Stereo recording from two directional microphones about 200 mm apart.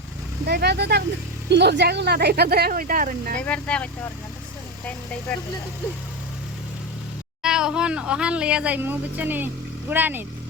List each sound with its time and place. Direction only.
0.4 s speech: 55° right (ahead or behind)
3.4 s speech: 5° left (ahead or behind)
7.4 s speech: 5° right (ahead or behind)